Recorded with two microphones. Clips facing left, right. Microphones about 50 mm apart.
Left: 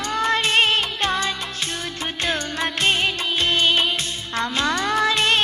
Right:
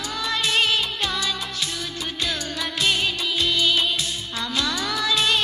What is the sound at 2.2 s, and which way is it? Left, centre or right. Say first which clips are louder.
Music of bollywood: left 4 dB; left.